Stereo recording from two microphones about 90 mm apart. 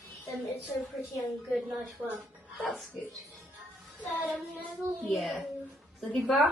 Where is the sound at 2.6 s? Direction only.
Centre (ahead or behind).